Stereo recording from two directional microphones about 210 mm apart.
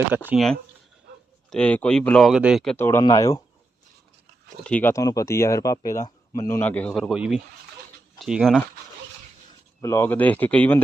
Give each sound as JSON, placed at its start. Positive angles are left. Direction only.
{"t": 0.3, "sound": "speech", "side_deg": 0}
{"t": 2.7, "sound": "speech", "side_deg": 10}
{"t": 4.6, "sound": "speech", "side_deg": 10}
{"t": 9.8, "sound": "speech", "side_deg": 15}